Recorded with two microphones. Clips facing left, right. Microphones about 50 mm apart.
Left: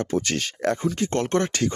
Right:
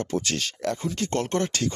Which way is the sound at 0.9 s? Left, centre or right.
Left.